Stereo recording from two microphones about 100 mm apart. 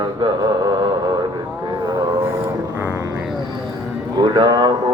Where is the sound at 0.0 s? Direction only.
45° right (ahead or behind).